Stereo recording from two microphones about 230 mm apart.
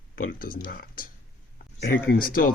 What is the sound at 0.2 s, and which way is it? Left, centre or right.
Speech, left.